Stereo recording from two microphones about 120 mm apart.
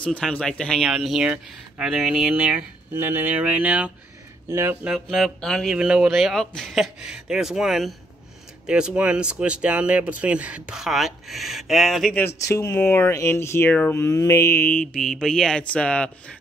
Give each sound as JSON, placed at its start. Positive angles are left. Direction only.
{"t": 0.0, "sound": "speech", "side_deg": 10}
{"t": 4.5, "sound": "speech", "side_deg": -20}
{"t": 4.8, "sound": "speech", "side_deg": 0}
{"t": 12.2, "sound": "speech", "side_deg": 25}